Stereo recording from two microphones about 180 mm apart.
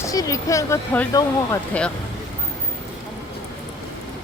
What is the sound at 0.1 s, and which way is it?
Speech, 20° left (ahead or behind).